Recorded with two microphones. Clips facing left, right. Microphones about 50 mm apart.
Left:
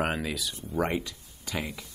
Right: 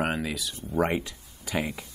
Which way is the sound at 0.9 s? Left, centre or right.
Centre.